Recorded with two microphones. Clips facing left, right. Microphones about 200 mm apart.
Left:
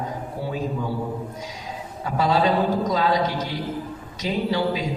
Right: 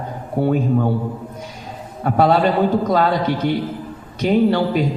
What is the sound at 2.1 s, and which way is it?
A man's voice, 60° right (ahead or behind).